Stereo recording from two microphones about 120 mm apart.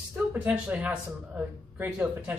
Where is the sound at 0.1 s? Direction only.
15° right (ahead or behind).